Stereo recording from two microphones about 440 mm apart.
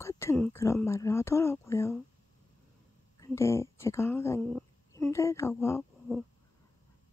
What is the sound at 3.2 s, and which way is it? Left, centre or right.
Speech, centre.